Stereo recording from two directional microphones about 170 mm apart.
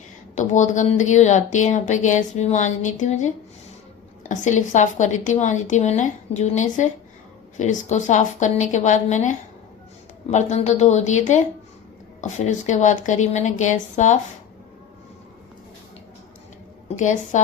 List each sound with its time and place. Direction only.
0.3 s speech: 45° left (ahead or behind)
16.9 s speech: 45° left (ahead or behind)